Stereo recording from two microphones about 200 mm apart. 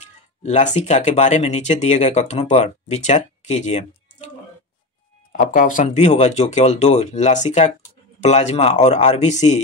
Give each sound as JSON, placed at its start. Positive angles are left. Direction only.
{"t": 0.4, "sound": "speech", "side_deg": 35}
{"t": 5.3, "sound": "speech", "side_deg": 45}